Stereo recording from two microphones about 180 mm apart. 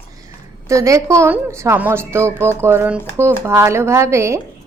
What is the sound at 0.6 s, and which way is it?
Speech, 15° right (ahead or behind).